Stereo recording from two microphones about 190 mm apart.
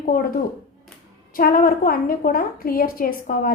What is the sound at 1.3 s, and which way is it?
A woman's voice, 45° left (ahead or behind).